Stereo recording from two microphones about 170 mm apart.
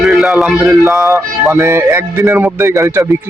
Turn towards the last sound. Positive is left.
turn(degrees=-15)  # may be behind; listen again after turning